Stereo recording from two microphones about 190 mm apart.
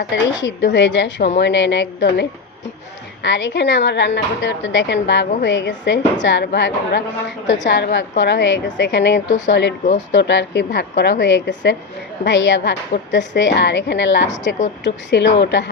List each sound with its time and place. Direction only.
0.1 s speech: 65° left (ahead or behind)
3.2 s a woman's voice: 70° left (ahead or behind)